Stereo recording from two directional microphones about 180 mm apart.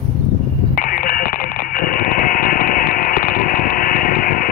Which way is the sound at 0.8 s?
50° left (ahead or behind).